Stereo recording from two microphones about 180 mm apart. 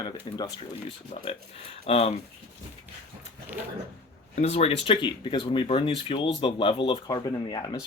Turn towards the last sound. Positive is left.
turn(degrees=25)  # may be behind; listen again after turning